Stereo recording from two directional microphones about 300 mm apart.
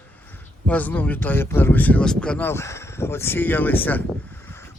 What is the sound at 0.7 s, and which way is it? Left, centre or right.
Speech, centre.